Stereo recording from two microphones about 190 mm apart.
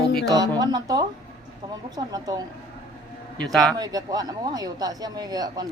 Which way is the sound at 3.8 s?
20° right (ahead or behind).